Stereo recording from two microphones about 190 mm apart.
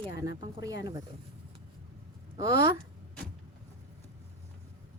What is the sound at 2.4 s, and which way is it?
Speech, 25° right (ahead or behind).